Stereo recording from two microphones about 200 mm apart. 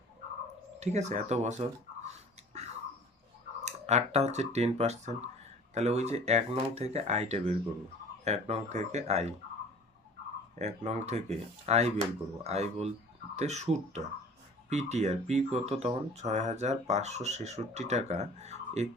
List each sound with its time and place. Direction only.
0.8 s speech: 35° right (ahead or behind)
2.0 s a sound: 35° right (ahead or behind)
3.6 s speech: 35° right (ahead or behind)
10.5 s speech: 35° right (ahead or behind)